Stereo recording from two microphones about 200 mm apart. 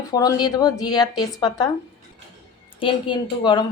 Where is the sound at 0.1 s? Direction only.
20° left (ahead or behind).